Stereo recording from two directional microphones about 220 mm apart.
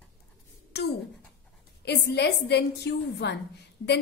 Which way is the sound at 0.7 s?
50° left (ahead or behind).